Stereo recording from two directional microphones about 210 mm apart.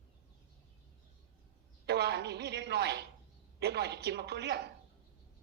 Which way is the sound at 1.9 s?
50° right (ahead or behind).